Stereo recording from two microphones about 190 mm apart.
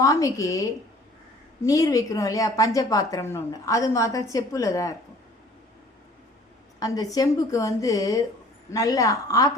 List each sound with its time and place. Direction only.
0.0 s a woman's voice: 15° left (ahead or behind)
6.7 s a woman's voice: 20° left (ahead or behind)